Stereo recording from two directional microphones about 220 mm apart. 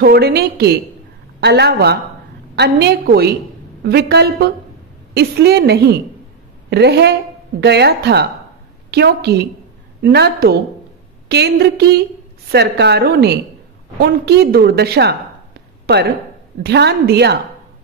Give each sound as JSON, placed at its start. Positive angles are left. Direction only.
{"t": 0.0, "sound": "a woman's voice", "side_deg": -45}